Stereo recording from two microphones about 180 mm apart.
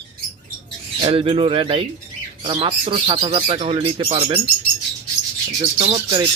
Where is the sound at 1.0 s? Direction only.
30° right (ahead or behind).